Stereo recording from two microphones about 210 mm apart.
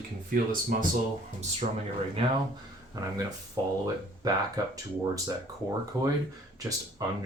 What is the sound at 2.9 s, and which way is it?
Speech, 20° right (ahead or behind).